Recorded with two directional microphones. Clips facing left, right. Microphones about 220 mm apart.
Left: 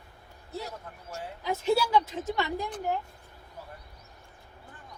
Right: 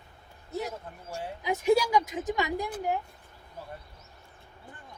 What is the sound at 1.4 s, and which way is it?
Speech, 15° right (ahead or behind).